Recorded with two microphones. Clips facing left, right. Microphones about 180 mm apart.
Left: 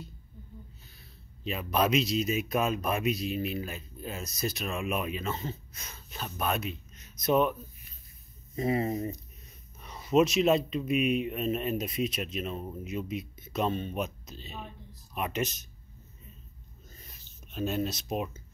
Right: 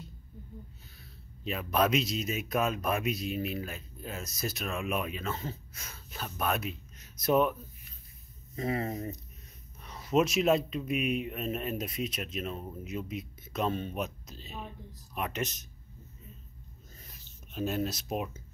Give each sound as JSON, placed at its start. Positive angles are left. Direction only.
{"t": 1.4, "sound": "speech", "side_deg": 0}
{"t": 8.5, "sound": "speech", "side_deg": 15}
{"t": 9.8, "sound": "speech", "side_deg": 0}
{"t": 17.5, "sound": "speech", "side_deg": -5}